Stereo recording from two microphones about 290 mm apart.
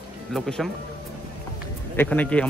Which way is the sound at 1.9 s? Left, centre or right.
Centre.